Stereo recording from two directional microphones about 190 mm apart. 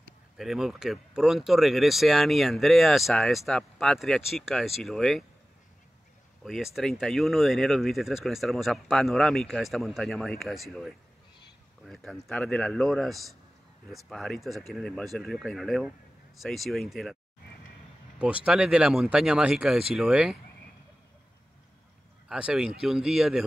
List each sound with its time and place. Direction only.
0.4 s speech: centre (ahead or behind)
6.4 s speech: centre (ahead or behind)
18.2 s speech: 5° right (ahead or behind)
22.3 s speech: 5° right (ahead or behind)